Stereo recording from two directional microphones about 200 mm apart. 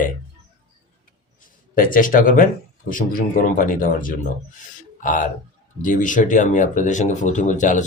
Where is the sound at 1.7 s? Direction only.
45° left (ahead or behind).